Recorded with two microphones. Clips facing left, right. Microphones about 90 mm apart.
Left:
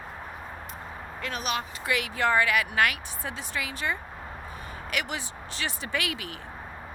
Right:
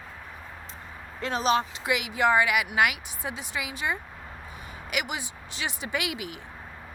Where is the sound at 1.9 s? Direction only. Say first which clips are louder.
Right 2 dB; 15° right (ahead or behind).